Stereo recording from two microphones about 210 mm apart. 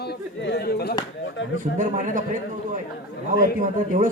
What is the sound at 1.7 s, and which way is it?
Speech, 40° right (ahead or behind).